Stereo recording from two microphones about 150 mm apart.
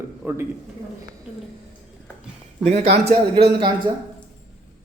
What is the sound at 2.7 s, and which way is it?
Speech, 45° right (ahead or behind).